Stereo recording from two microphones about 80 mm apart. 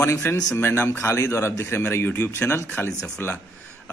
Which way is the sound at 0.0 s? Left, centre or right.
Left.